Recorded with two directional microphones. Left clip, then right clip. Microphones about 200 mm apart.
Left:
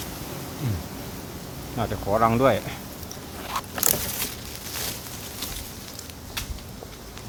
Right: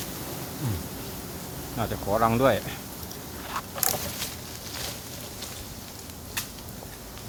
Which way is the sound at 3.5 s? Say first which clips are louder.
Left 3 dB; 50° left (ahead or behind).